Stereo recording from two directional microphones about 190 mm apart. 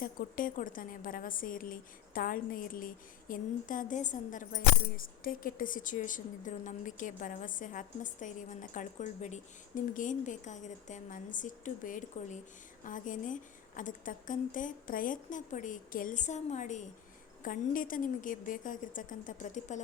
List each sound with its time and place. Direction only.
0.0 s a woman's voice: 50° left (ahead or behind)